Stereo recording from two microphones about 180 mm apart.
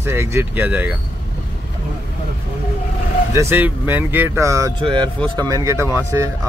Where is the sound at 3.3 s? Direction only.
15° right (ahead or behind).